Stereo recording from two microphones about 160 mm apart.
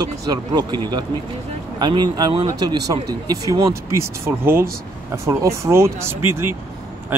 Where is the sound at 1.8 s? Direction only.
25° right (ahead or behind).